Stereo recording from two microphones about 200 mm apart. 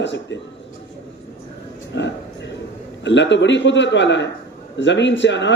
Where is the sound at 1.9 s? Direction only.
60° left (ahead or behind).